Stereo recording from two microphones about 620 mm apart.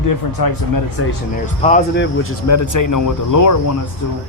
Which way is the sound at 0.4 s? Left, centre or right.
Left.